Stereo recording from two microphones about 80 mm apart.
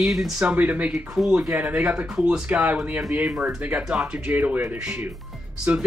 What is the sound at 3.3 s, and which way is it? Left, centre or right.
Speech, centre.